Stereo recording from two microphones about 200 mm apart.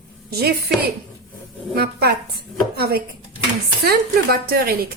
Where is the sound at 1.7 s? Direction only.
50° right (ahead or behind).